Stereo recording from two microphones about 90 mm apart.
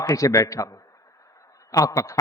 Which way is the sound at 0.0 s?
40° left (ahead or behind).